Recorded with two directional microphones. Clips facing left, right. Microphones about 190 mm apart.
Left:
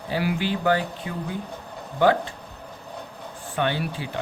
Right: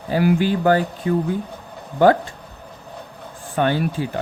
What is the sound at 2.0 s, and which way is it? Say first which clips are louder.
Speech: right 5 dB; 45° right (ahead or behind).